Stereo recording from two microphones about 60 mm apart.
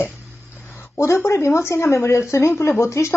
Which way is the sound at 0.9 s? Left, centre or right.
Left.